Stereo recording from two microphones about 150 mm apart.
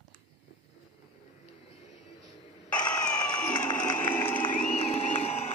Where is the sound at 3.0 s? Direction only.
10° left (ahead or behind).